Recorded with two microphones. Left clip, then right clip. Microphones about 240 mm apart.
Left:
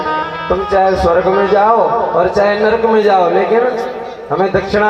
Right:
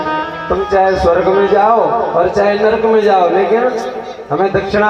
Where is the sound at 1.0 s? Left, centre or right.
Left.